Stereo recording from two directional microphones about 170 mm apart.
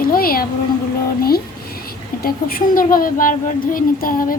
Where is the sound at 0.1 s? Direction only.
60° left (ahead or behind).